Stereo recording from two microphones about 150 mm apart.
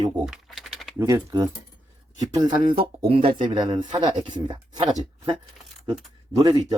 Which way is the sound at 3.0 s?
40° right (ahead or behind).